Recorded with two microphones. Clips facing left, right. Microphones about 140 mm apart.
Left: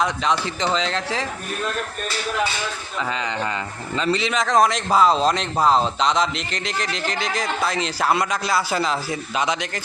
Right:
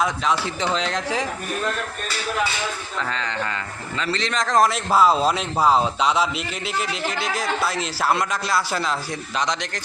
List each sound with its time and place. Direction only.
0.0 s speech: 5° right (ahead or behind)
3.9 s speech: 20° left (ahead or behind)
4.2 s a man's voice: 5° left (ahead or behind)